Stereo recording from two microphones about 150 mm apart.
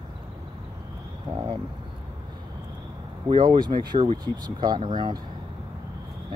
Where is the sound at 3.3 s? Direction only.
30° right (ahead or behind).